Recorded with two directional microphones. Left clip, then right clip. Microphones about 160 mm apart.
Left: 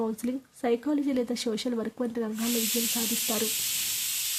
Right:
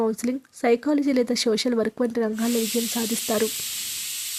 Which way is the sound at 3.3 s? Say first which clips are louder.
Right 9 dB; 45° right (ahead or behind).